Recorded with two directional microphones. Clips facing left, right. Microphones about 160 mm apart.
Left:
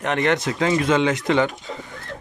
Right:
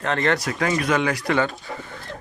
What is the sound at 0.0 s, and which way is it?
Speech, 20° left (ahead or behind).